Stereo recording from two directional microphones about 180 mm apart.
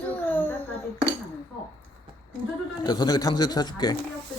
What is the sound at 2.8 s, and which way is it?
Speech, 20° left (ahead or behind).